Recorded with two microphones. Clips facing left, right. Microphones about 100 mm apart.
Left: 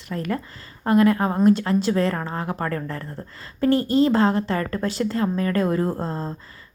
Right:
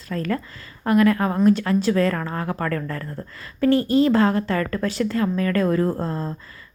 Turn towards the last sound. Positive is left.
turn(degrees=25)  # may be behind; listen again after turning